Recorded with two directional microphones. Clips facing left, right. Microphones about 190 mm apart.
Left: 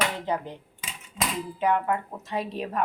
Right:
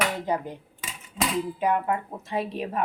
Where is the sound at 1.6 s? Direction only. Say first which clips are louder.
Left 3 dB; 10° right (ahead or behind).